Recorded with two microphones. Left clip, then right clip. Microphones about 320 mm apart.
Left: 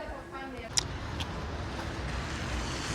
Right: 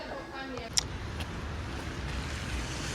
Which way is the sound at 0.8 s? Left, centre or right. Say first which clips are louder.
Even; centre.